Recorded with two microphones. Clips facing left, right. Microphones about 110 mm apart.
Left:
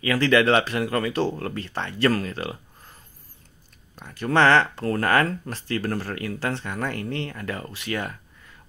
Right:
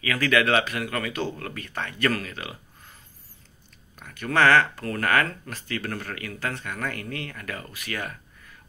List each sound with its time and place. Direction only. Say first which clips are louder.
0.0 s speech: left 4 dB; 30° left (ahead or behind)